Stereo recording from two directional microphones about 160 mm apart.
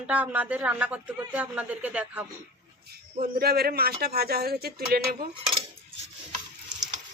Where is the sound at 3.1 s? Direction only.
65° right (ahead or behind).